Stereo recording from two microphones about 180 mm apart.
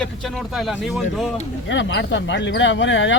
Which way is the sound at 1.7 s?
90° left.